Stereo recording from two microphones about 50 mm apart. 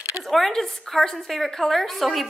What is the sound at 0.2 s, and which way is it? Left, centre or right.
A woman's voice, centre.